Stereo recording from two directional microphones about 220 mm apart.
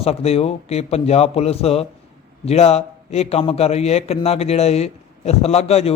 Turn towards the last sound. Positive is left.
turn(degrees=30)  # may be behind; listen again after turning